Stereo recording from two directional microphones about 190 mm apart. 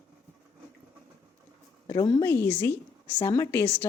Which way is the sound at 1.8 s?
20° left (ahead or behind).